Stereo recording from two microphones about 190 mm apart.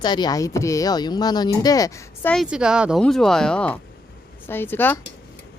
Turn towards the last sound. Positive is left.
turn(degrees=10)  # may be behind; listen again after turning